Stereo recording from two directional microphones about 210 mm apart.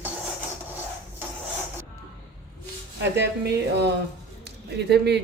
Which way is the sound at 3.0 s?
55° right (ahead or behind).